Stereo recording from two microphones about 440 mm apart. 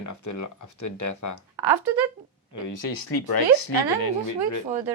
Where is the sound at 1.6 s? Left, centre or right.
Right.